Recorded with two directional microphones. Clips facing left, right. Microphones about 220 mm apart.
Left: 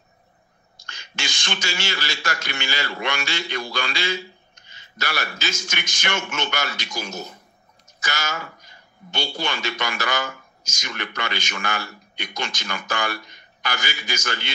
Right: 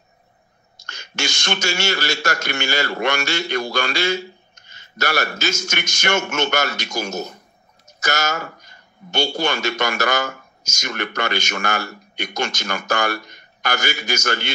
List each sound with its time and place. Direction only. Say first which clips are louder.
0.7 s a man's voice: right 7 dB; 45° right (ahead or behind)